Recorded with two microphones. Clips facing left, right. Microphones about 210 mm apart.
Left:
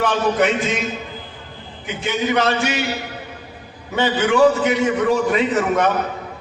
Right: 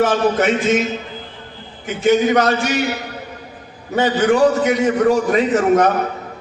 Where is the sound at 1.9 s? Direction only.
45° right (ahead or behind).